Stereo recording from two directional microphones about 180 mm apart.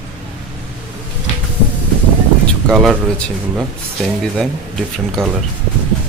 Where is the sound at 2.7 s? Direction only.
Centre (ahead or behind).